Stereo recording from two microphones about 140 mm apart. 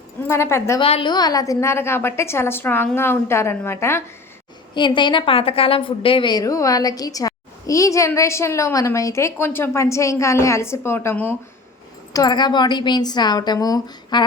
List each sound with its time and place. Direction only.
0.3 s a woman's voice: 20° left (ahead or behind)
0.8 s a woman's voice: 40° left (ahead or behind); by 4.0 s 15° left (ahead or behind)
4.7 s a woman's voice: 35° left (ahead or behind); by 11.3 s 15° left (ahead or behind)
12.1 s speech: 30° left (ahead or behind)